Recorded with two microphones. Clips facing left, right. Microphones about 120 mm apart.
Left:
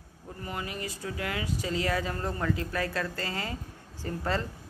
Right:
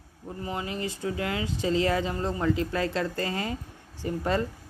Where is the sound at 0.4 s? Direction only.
25° right (ahead or behind).